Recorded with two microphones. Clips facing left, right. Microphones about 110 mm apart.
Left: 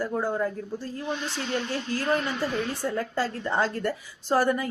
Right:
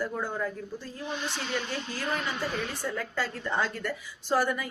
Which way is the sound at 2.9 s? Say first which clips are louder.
Left 5 dB; 35° left (ahead or behind).